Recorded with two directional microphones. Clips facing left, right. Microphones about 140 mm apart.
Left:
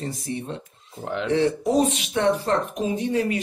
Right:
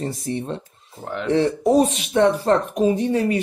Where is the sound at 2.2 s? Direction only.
40° right (ahead or behind).